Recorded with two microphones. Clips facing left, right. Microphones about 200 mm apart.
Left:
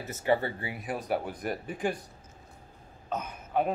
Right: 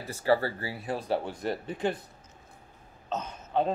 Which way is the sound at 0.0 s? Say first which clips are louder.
Even; 20° left (ahead or behind).